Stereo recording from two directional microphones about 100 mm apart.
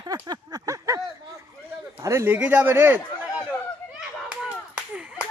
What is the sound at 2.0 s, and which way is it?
Speech, 30° right (ahead or behind).